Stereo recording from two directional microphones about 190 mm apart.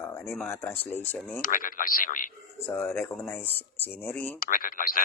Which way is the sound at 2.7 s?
10° left (ahead or behind).